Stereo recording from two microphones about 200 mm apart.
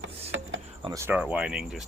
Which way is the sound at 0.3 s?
75° right (ahead or behind).